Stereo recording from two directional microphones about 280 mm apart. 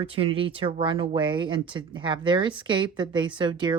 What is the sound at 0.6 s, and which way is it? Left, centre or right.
A woman's voice, centre.